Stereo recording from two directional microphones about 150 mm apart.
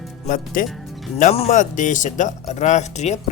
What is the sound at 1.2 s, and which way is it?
Speech, 45° left (ahead or behind).